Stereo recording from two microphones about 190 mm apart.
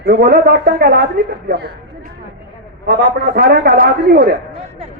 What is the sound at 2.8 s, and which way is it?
A man's voice, 55° right (ahead or behind).